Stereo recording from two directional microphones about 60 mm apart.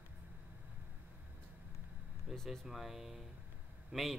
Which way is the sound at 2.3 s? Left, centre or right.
Centre.